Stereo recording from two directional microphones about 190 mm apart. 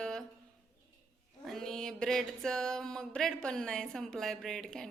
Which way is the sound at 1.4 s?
Centre (ahead or behind).